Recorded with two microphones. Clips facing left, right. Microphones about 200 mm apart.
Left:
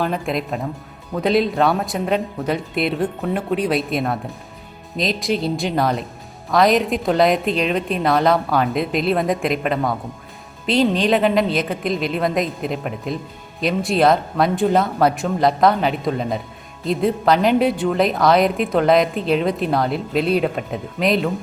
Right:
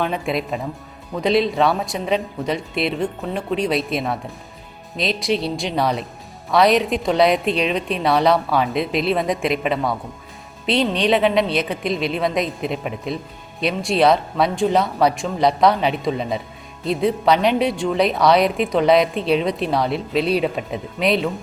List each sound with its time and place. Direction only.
0.0 s a woman's voice: centre (ahead or behind)